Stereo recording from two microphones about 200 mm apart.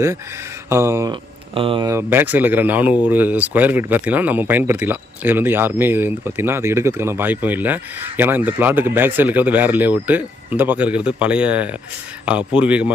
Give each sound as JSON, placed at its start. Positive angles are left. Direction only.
{"t": 0.7, "sound": "speech", "side_deg": -15}
{"t": 1.9, "sound": "speech", "side_deg": -10}